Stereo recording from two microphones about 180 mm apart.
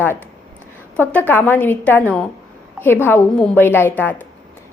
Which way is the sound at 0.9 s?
10° left (ahead or behind).